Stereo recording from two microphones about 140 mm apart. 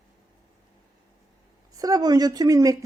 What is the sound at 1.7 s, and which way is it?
A woman's voice, 25° right (ahead or behind).